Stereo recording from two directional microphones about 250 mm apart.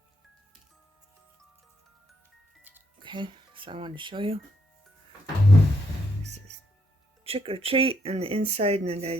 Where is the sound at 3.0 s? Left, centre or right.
Centre.